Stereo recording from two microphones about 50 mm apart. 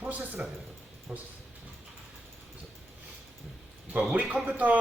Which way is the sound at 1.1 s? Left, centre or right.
Right.